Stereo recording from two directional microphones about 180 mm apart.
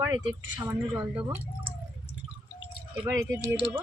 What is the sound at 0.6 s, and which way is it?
A woman's voice, 10° right (ahead or behind).